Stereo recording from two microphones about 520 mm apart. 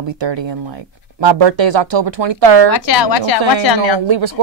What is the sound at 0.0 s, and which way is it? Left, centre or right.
Speech, right.